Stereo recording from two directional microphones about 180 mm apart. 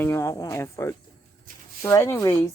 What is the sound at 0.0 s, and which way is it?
Speech, 15° left (ahead or behind).